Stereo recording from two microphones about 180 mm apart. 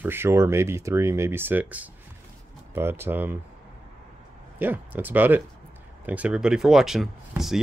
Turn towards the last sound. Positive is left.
turn(degrees=0)  # may be behind; listen again after turning